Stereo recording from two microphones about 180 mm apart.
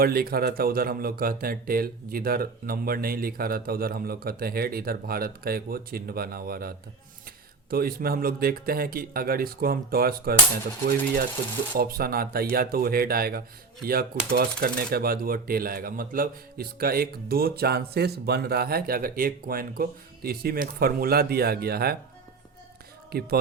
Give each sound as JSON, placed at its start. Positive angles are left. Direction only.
{"t": 0.0, "sound": "speech", "side_deg": -55}